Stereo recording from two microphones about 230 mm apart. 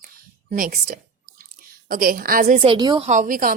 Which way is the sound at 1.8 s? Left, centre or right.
Right.